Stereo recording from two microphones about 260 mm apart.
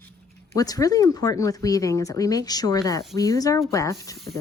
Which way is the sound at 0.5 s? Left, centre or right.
Centre.